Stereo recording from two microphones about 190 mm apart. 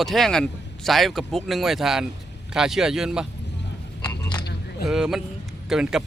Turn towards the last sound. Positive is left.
turn(degrees=0)  # may be behind; listen again after turning